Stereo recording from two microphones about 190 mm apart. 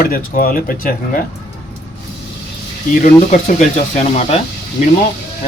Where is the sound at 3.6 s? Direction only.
40° left (ahead or behind).